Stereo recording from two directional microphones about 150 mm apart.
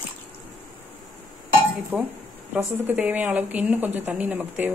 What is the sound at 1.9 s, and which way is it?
A woman's voice, 10° right (ahead or behind).